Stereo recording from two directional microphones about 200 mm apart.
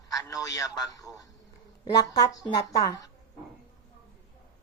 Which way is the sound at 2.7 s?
20° left (ahead or behind).